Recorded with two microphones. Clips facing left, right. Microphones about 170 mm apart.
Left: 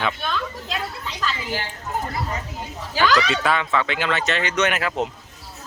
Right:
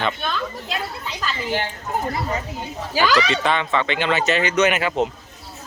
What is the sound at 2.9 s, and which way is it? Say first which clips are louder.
Speech: right 1 dB; 10° right (ahead or behind).